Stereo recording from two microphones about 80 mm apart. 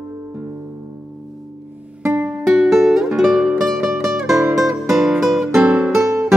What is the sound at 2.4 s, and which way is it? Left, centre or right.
Music, centre.